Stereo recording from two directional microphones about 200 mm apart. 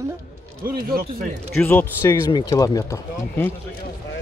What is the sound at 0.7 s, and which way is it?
Speech, 50° right (ahead or behind).